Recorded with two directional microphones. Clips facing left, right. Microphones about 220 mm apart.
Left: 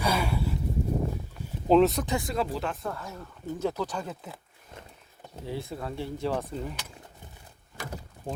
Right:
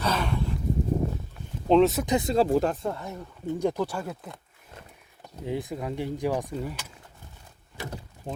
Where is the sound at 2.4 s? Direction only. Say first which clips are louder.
Right 9 dB; 50° right (ahead or behind).